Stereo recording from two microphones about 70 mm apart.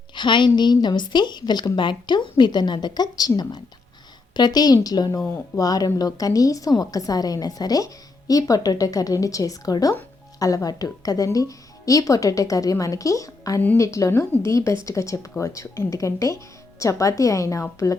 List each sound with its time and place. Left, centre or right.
0.1 s a woman's voice: left